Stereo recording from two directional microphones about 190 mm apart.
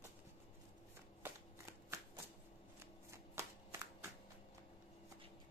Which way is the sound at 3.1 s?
15° right (ahead or behind).